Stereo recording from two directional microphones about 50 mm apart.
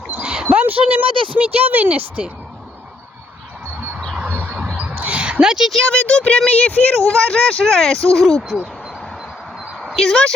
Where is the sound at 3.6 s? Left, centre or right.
Right.